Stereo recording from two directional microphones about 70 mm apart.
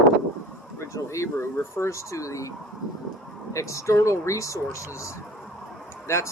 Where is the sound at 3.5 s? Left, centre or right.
Left.